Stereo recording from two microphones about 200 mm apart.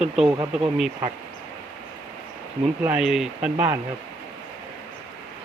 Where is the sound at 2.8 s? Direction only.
5° right (ahead or behind).